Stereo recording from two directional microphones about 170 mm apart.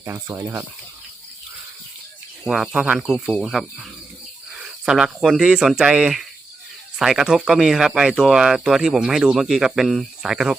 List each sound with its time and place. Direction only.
0.0 s speech: 15° right (ahead or behind)
2.5 s speech: 5° right (ahead or behind)